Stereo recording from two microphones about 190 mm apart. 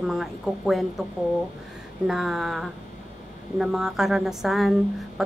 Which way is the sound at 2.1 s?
Centre (ahead or behind).